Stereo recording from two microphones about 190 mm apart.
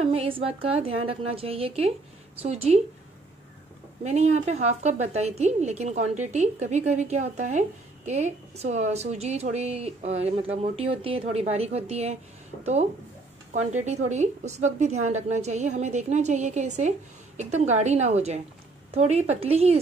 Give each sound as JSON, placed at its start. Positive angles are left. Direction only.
{"t": 0.0, "sound": "a woman's voice", "side_deg": -30}
{"t": 4.0, "sound": "a woman's voice", "side_deg": -35}
{"t": 13.5, "sound": "a woman's voice", "side_deg": -40}